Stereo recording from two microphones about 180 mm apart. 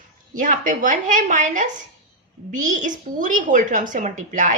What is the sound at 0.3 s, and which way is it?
A woman's voice, 45° right (ahead or behind).